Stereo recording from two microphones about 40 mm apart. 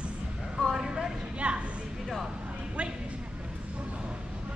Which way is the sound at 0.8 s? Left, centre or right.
Centre.